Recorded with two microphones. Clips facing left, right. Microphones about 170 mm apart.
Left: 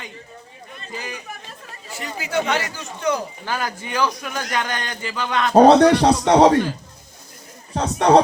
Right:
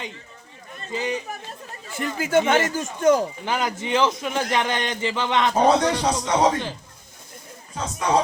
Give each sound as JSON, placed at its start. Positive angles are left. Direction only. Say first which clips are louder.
{"t": 0.9, "sound": "a man's voice", "louder": "right 7 dB", "side_deg": -25}
{"t": 1.9, "sound": "speech", "louder": "right 5 dB", "side_deg": -50}
{"t": 3.4, "sound": "a man's voice", "louder": "right 2 dB", "side_deg": -20}
{"t": 5.5, "sound": "speech", "louder": "left 10 dB", "side_deg": 70}
{"t": 7.7, "sound": "speech", "louder": "left 7 dB", "side_deg": 65}